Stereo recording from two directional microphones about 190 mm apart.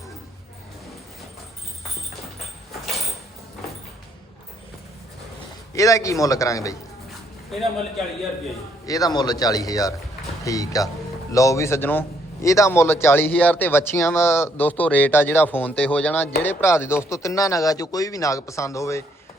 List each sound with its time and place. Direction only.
5.7 s a man's voice: 15° left (ahead or behind)
8.9 s a man's voice: 20° left (ahead or behind)